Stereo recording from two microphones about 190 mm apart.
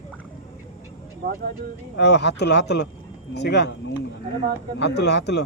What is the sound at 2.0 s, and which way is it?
Speech, 65° left (ahead or behind).